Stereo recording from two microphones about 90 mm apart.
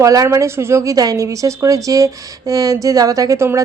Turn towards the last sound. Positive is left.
turn(degrees=-35)  # may be behind; listen again after turning